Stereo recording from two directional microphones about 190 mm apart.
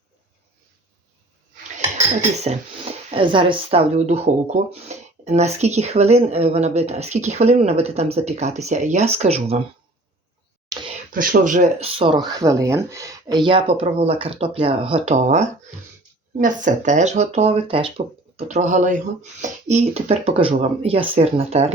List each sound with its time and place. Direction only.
2.0 s speech: 35° right (ahead or behind)
10.7 s whispering: 25° right (ahead or behind)
11.1 s speech: 45° right (ahead or behind); by 12.2 s 30° right (ahead or behind)
12.3 s speech: 15° right (ahead or behind); by 21.7 s 35° right (ahead or behind)